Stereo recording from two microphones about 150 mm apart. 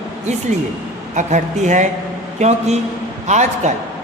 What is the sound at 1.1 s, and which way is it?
Speech, 50° right (ahead or behind).